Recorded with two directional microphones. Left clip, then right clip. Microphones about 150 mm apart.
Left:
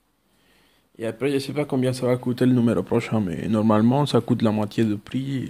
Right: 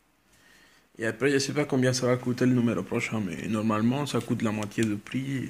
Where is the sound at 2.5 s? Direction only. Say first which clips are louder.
Left 8 dB; 65° left (ahead or behind); by 5.4 s 45° left (ahead or behind).